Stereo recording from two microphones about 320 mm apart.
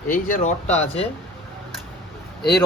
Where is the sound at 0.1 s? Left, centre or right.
Left.